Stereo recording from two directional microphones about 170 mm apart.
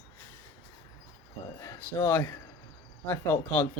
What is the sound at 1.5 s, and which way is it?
Speech, 15° left (ahead or behind).